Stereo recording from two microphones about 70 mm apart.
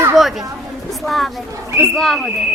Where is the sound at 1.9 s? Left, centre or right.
Centre.